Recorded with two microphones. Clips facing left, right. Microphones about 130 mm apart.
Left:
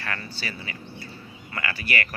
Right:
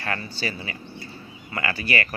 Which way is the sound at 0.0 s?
30° right (ahead or behind).